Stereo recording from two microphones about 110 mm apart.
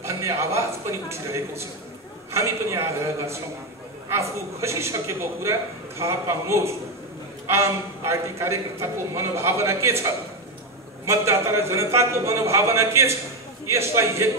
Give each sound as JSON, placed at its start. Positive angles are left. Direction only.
{"t": 0.0, "sound": "a woman's voice", "side_deg": -25}
{"t": 11.1, "sound": "a woman's voice", "side_deg": -25}